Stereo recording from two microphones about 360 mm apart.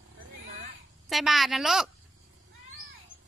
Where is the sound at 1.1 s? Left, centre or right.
Centre.